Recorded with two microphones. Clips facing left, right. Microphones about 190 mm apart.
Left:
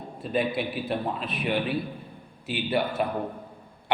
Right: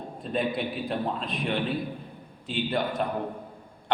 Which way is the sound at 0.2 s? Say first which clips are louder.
Left 2 dB; 5° left (ahead or behind).